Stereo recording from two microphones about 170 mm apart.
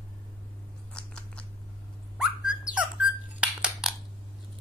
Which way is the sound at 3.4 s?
5° right (ahead or behind).